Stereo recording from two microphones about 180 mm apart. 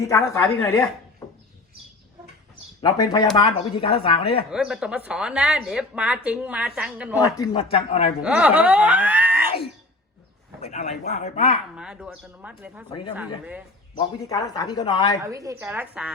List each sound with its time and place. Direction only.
0.0 s speech: 15° left (ahead or behind)
2.8 s speech: 20° left (ahead or behind)
4.5 s speech: 5° right (ahead or behind)
7.2 s speech: 20° left (ahead or behind)
8.2 s speech: 10° right (ahead or behind)
10.6 s speech: 35° left (ahead or behind)
11.8 s speech: 5° right (ahead or behind)
14.3 s speech: 20° left (ahead or behind)
15.2 s speech: 15° right (ahead or behind)
15.6 s speech: 5° right (ahead or behind)